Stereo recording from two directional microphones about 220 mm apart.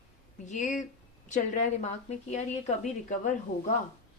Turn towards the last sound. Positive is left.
turn(degrees=35)  # may be behind; listen again after turning